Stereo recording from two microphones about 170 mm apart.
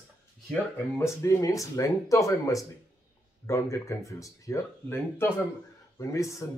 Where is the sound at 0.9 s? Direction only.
15° left (ahead or behind).